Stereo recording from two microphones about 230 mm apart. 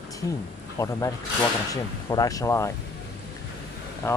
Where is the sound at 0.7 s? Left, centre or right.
Centre.